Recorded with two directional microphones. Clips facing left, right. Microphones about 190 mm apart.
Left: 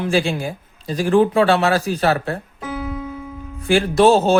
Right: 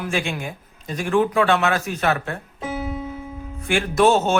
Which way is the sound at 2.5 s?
25° right (ahead or behind).